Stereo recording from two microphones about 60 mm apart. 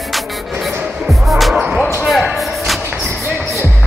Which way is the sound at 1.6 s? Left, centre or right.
Right.